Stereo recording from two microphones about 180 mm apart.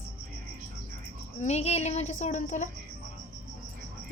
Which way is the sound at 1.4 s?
35° left (ahead or behind).